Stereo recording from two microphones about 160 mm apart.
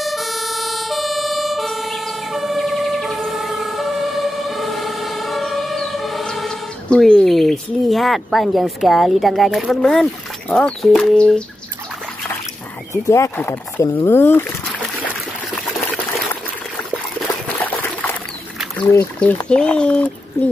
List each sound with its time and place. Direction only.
0.0 s emergency vehicle: centre (ahead or behind)
10.5 s speech: 5° left (ahead or behind)
12.9 s speech: 20° left (ahead or behind)
17.5 s liquid: 10° left (ahead or behind)
19.2 s speech: 5° left (ahead or behind)